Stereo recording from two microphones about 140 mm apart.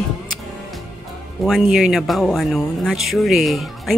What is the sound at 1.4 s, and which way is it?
Speech, centre (ahead or behind).